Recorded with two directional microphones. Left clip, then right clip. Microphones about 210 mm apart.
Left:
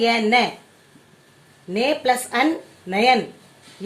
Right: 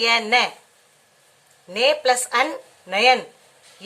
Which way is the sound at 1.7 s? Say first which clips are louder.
Right 1 dB; centre (ahead or behind).